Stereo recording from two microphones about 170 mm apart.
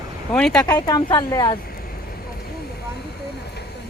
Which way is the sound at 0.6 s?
20° left (ahead or behind).